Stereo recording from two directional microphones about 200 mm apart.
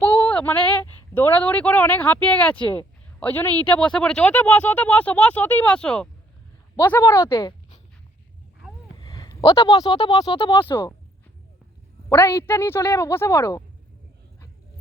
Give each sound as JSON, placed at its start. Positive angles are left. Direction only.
{"t": 0.0, "sound": "a woman's voice", "side_deg": 10}
{"t": 9.1, "sound": "a sound", "side_deg": 20}
{"t": 9.6, "sound": "speech", "side_deg": 20}
{"t": 10.7, "sound": "a woman's voice", "side_deg": 10}
{"t": 12.0, "sound": "a woman's voice", "side_deg": 15}